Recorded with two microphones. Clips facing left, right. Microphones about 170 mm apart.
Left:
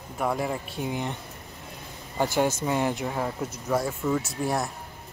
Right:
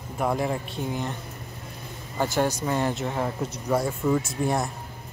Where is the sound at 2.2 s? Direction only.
15° left (ahead or behind).